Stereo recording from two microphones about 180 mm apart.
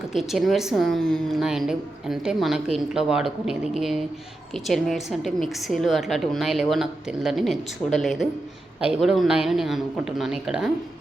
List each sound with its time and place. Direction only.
0.1 s a woman's voice: centre (ahead or behind)